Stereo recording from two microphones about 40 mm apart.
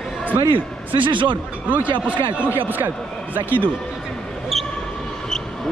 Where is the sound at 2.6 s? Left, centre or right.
Right.